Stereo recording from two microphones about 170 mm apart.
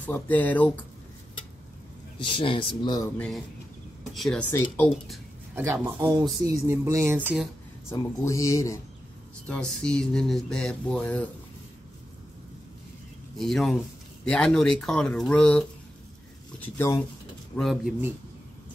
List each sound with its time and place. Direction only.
0.0 s speech: 10° left (ahead or behind)
2.1 s speech: 30° left (ahead or behind)
3.2 s speech: centre (ahead or behind)
5.5 s speech: 15° right (ahead or behind)
7.9 s speech: 20° left (ahead or behind)
9.5 s speech: 5° left (ahead or behind)
13.4 s speech: centre (ahead or behind)
17.6 s speech: centre (ahead or behind)